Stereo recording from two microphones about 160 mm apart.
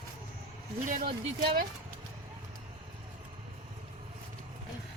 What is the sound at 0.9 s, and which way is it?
Speech, 65° right (ahead or behind).